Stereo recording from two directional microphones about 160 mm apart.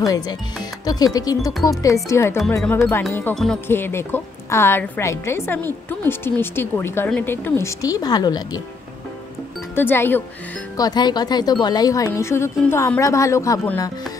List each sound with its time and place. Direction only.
0.0 s a woman's voice: 20° left (ahead or behind)
9.8 s a woman's voice: 15° left (ahead or behind)
10.8 s speech: 25° left (ahead or behind)